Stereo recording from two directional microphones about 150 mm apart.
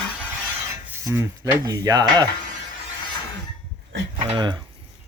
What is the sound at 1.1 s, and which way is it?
Speech, 20° right (ahead or behind).